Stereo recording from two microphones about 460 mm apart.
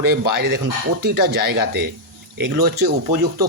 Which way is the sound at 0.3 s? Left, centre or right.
Right.